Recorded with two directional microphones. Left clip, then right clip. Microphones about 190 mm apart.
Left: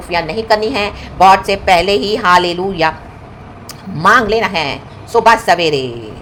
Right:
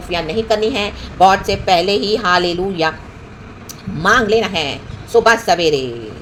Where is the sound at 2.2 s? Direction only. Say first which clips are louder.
Left 4 dB; 15° left (ahead or behind).